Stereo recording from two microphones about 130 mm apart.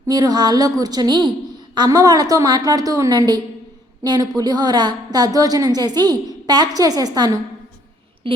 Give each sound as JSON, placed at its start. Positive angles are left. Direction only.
{"t": 0.0, "sound": "a woman's voice", "side_deg": -30}